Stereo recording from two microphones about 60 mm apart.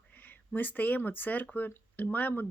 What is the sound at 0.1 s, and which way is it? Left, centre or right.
Speech, left.